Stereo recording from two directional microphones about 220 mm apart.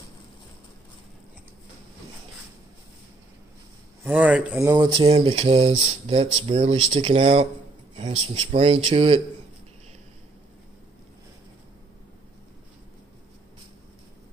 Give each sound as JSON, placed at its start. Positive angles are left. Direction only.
{"t": 4.0, "sound": "speech", "side_deg": -5}